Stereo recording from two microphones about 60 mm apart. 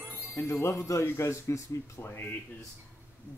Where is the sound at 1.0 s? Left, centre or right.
Left.